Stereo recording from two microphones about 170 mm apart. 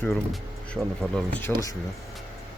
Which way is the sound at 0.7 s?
5° left (ahead or behind).